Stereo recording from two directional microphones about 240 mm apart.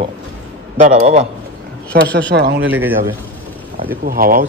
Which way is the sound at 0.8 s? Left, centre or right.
Right.